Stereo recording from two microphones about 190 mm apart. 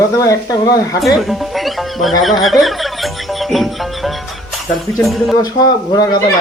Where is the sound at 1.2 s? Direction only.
Centre (ahead or behind).